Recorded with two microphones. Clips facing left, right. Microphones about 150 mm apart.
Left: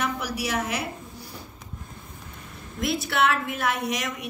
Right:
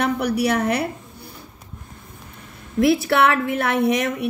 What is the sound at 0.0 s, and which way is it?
Speech, 60° right (ahead or behind).